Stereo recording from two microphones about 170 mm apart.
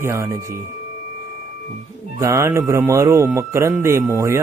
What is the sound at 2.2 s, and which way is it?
Speech, 15° right (ahead or behind).